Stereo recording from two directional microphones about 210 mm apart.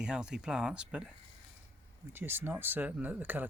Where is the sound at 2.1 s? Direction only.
10° right (ahead or behind).